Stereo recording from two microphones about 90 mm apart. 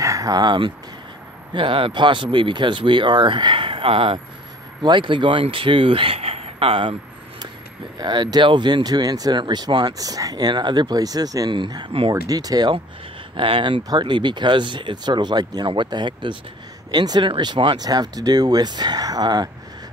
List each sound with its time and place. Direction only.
0.0 s speech: 40° right (ahead or behind); by 0.7 s 60° right (ahead or behind)
1.5 s speech: 75° right (ahead or behind)
4.8 s speech: 65° right (ahead or behind); by 7.0 s 90° right
8.0 s speech: 55° right (ahead or behind)
11.5 s speech: 60° right (ahead or behind)
12.1 s speech: 45° right (ahead or behind)
13.4 s speech: 70° right (ahead or behind)
13.8 s speech: 55° right (ahead or behind)
16.9 s speech: 50° right (ahead or behind)
17.3 s speech: 60° right (ahead or behind)
17.8 s speech: 50° right (ahead or behind)